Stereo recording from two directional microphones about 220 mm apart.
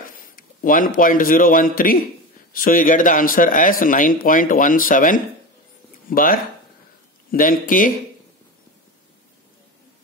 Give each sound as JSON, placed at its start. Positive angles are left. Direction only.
{"t": 0.0, "sound": "a man's voice", "side_deg": 40}